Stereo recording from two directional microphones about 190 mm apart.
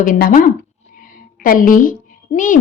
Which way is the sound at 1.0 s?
45° left (ahead or behind).